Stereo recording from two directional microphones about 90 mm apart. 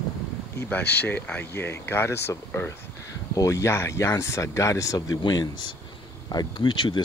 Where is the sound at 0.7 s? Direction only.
20° left (ahead or behind); by 5.0 s 40° left (ahead or behind).